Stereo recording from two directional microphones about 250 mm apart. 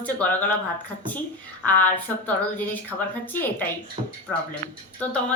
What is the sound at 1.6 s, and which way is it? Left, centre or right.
Speech, centre.